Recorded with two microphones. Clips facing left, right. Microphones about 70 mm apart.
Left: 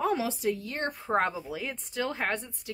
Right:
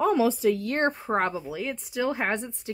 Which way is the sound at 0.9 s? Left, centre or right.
Right.